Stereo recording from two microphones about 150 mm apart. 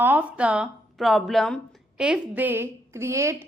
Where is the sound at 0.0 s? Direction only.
10° right (ahead or behind).